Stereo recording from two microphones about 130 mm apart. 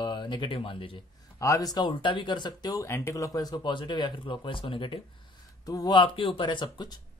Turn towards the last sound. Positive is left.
turn(degrees=35)  # may be behind; listen again after turning